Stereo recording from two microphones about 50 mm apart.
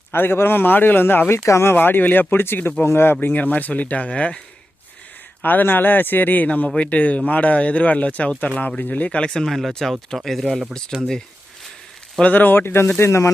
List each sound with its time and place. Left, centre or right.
0.1 s a man's voice: left
1.7 s a man's voice: left
3.2 s speech: left
5.4 s speech: left
9.3 s speech: centre
10.9 s speech: centre
12.2 s a man's voice: left
13.0 s speech: left